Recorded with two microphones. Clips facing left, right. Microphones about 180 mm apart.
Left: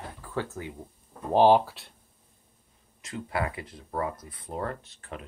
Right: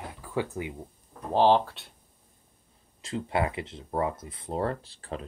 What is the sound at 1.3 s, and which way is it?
Speech, 10° left (ahead or behind).